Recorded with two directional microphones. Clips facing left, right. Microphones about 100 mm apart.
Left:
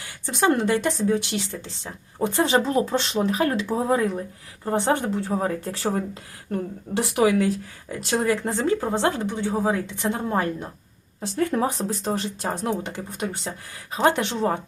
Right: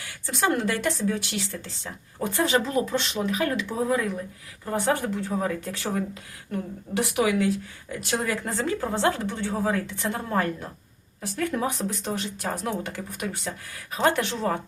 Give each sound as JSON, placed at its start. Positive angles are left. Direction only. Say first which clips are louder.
{"t": 0.3, "sound": "speech", "louder": "left 4 dB", "side_deg": 20}